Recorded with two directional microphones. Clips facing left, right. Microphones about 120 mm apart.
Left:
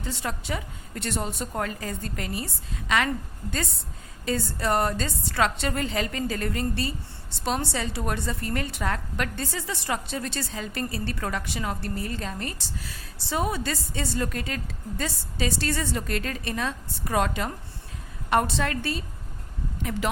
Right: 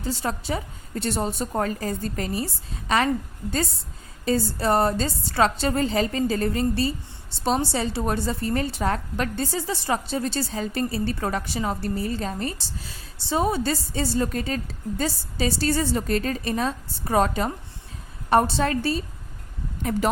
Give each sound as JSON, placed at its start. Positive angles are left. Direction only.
{"t": 0.0, "sound": "a woman's voice", "side_deg": -35}
{"t": 4.3, "sound": "a woman's voice", "side_deg": -35}